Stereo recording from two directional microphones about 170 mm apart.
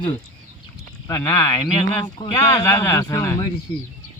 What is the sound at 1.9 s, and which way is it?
A man's voice, 30° left (ahead or behind).